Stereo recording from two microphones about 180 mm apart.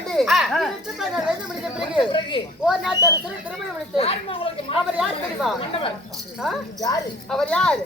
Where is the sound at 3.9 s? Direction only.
30° left (ahead or behind).